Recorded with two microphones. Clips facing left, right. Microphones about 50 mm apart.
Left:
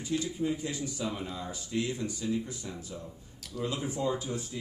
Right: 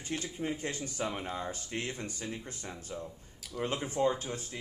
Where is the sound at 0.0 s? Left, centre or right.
Right.